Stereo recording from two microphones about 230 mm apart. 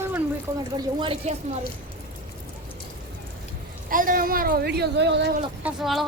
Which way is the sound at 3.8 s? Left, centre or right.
Right.